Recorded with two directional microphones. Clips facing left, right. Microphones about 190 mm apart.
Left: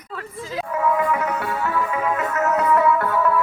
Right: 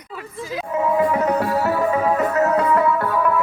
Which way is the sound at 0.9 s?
35° right (ahead or behind).